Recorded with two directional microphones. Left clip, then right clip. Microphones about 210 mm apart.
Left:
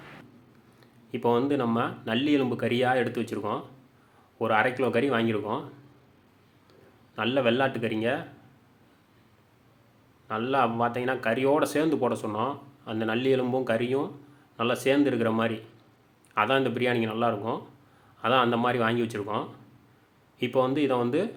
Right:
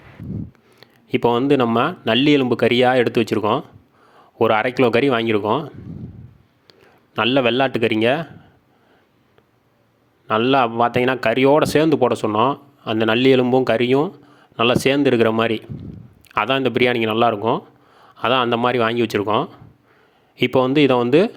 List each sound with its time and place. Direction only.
0.8 s speech: 45° right (ahead or behind)
7.2 s speech: 45° right (ahead or behind)
10.2 s speech: 45° right (ahead or behind)